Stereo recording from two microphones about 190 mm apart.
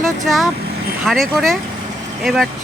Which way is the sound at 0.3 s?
Centre (ahead or behind).